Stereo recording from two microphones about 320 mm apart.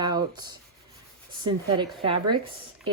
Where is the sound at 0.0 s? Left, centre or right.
Centre.